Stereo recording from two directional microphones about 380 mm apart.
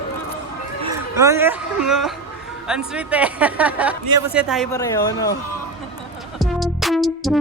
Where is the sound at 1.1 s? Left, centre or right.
Centre.